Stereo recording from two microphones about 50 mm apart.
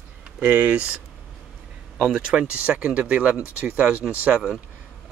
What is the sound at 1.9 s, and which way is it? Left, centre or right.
Speech, centre.